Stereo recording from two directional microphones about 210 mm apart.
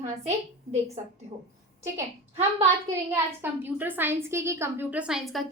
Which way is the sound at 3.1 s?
10° right (ahead or behind).